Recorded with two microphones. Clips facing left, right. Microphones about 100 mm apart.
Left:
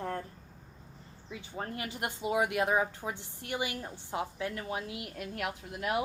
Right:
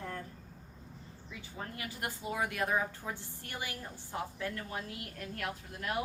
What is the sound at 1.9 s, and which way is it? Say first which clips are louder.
A woman's voice: left 6 dB; 20° left (ahead or behind).